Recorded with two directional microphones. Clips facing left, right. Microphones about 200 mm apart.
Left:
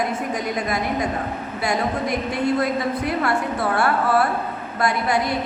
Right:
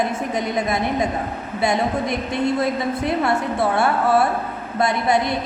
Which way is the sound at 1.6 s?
25° right (ahead or behind).